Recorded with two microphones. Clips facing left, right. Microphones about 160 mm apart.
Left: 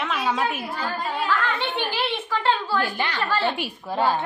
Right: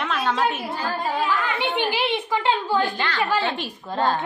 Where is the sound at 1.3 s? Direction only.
15° right (ahead or behind).